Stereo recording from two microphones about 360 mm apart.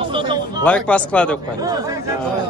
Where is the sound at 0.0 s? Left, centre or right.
Centre.